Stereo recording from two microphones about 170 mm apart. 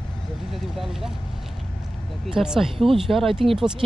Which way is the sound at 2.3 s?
Centre (ahead or behind).